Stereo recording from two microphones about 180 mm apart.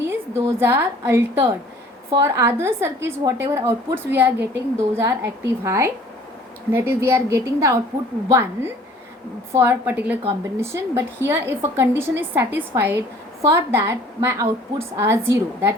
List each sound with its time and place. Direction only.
0.1 s a woman's voice: 15° right (ahead or behind)